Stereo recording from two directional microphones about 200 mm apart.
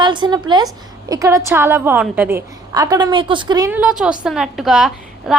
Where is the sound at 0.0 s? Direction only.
25° right (ahead or behind).